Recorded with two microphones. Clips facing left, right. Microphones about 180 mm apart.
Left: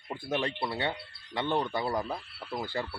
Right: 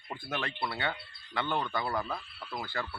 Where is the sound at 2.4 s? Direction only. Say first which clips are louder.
Left 3 dB; 20° left (ahead or behind).